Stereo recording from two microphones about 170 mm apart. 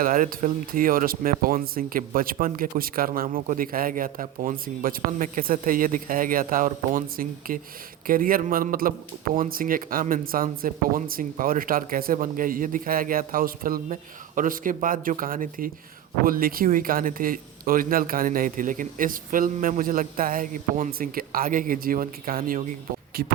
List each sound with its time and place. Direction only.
0.0 s a man's voice: 55° right (ahead or behind)